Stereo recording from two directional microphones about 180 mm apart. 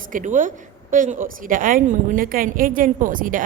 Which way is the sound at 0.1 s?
45° right (ahead or behind).